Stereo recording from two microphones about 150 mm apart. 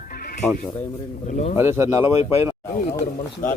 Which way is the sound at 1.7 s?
20° right (ahead or behind).